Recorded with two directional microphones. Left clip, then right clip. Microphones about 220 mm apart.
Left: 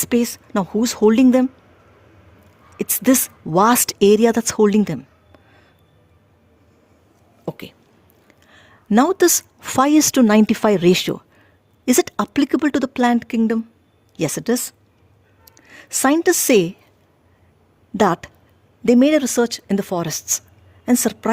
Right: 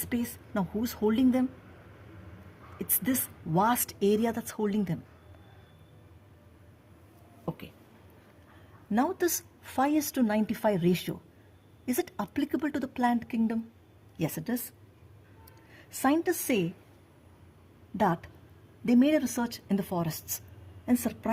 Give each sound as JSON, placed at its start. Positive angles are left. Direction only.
{"t": 0.0, "sound": "a woman's voice", "side_deg": 50}
{"t": 3.0, "sound": "a woman's voice", "side_deg": 50}
{"t": 7.4, "sound": "speech", "side_deg": 55}
{"t": 8.9, "sound": "a woman's voice", "side_deg": 50}
{"t": 15.7, "sound": "a woman's voice", "side_deg": 50}
{"t": 17.9, "sound": "a woman's voice", "side_deg": 50}